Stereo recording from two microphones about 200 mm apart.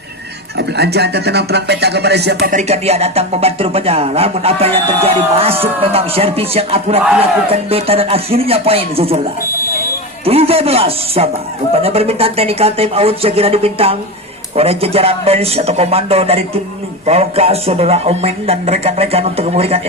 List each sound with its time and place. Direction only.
0.5 s speech: 55° right (ahead or behind)
2.6 s speech: 30° right (ahead or behind)
10.2 s speech: 30° right (ahead or behind)